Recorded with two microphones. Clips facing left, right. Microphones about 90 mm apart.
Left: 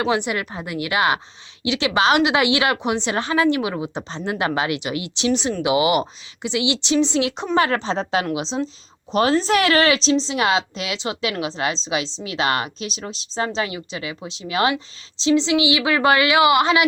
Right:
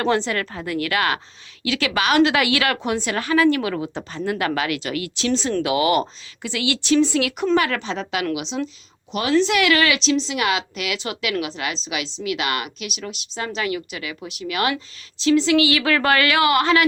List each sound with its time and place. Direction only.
0.0 s a woman's voice: 15° left (ahead or behind)